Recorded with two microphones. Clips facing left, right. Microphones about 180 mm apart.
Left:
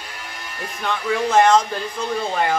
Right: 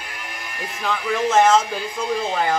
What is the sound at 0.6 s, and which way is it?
Speech, 5° right (ahead or behind).